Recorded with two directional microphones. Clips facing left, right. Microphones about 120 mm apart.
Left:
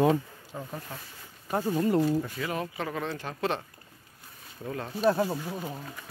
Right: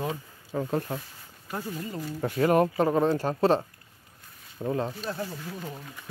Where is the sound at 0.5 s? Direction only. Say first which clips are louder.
Right 9 dB; 90° right.